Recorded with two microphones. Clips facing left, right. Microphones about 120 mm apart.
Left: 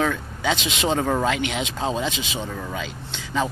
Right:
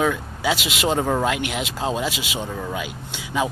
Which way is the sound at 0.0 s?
5° right (ahead or behind).